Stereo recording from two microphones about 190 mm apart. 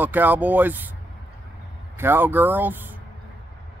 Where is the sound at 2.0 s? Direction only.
10° right (ahead or behind).